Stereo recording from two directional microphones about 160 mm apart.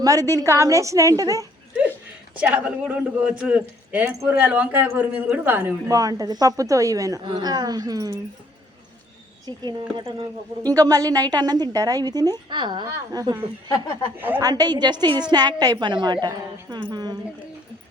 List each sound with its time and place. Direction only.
0.0 s a woman's voice: 20° right (ahead or behind)
2.3 s a man's voice: 10° right (ahead or behind)
9.6 s a woman's voice: 25° right (ahead or behind)
13.7 s speech: 20° left (ahead or behind)
14.2 s a man's voice: 10° right (ahead or behind)
14.4 s a woman's voice: 25° right (ahead or behind)